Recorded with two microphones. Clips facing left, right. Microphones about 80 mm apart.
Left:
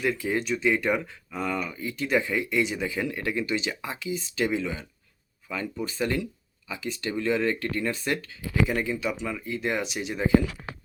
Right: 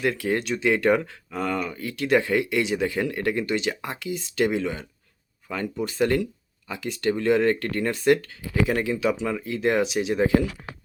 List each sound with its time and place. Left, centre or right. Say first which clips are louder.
0.0 s speech: right 2 dB; right
8.6 s speech: right 4 dB; right